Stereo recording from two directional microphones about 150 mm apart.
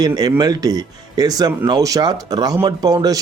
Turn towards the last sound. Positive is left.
turn(degrees=-25)  # may be behind; listen again after turning